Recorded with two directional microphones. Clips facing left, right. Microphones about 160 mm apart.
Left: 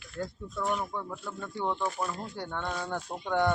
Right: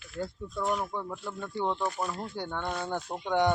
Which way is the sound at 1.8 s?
Centre (ahead or behind).